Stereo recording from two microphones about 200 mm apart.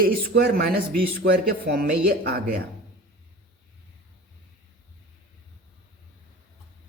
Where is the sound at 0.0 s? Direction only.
50° right (ahead or behind).